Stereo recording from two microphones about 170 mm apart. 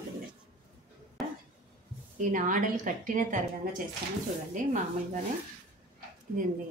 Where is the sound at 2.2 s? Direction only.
50° right (ahead or behind).